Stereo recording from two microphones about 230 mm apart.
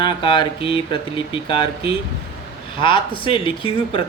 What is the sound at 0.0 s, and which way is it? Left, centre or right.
Speech, left.